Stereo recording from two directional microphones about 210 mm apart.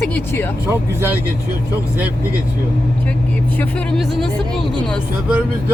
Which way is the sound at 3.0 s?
5° left (ahead or behind).